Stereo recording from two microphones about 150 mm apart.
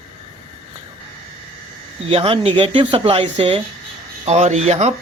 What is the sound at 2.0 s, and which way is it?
Speech, 40° right (ahead or behind).